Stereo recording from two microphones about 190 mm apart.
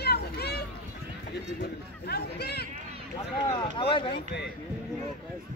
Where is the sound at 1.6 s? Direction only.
60° left (ahead or behind).